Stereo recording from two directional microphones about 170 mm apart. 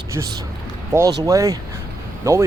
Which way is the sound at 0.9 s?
15° right (ahead or behind).